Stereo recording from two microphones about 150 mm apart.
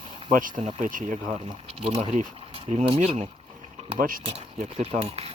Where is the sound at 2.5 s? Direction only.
50° right (ahead or behind).